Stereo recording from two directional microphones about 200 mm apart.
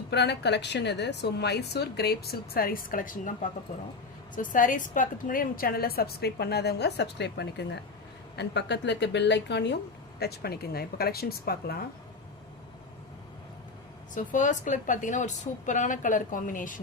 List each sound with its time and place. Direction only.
0.1 s a woman's voice: 60° left (ahead or behind); by 3.3 s 40° left (ahead or behind)
4.4 s a woman's voice: 40° left (ahead or behind)
14.1 s a woman's voice: 40° left (ahead or behind)